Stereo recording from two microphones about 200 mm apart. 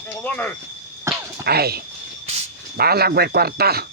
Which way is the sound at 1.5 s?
50° right (ahead or behind).